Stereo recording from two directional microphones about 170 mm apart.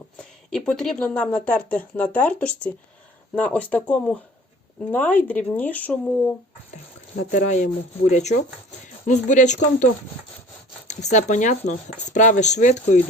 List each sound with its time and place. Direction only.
0.2 s speech: 5° left (ahead or behind)
7.3 s speech: 45° left (ahead or behind)